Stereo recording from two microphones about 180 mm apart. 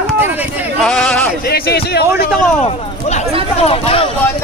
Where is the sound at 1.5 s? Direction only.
60° left (ahead or behind).